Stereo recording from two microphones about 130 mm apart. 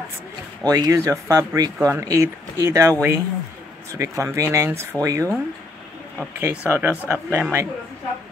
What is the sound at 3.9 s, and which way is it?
Speech, 25° right (ahead or behind).